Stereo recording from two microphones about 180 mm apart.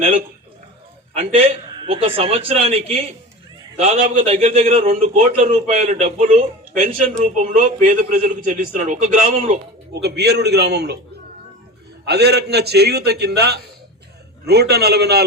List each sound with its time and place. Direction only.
1.2 s a man's voice: 35° right (ahead or behind)
9.9 s a man's voice: 65° right (ahead or behind)
12.0 s a man's voice: 65° right (ahead or behind)